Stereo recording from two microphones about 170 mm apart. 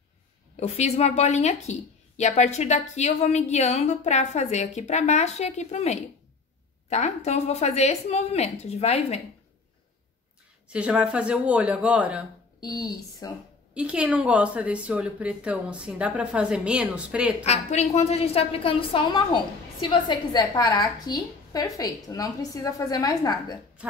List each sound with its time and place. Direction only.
0.6 s a woman's voice: 40° left (ahead or behind)
10.7 s speech: 5° right (ahead or behind)
12.5 s speech: 25° left (ahead or behind)
13.7 s speech: 5° right (ahead or behind)
17.5 s a woman's voice: 40° left (ahead or behind); by 23.3 s 20° left (ahead or behind)